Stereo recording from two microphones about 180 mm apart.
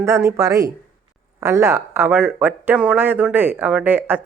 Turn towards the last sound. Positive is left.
turn(degrees=-10)  # may be behind; listen again after turning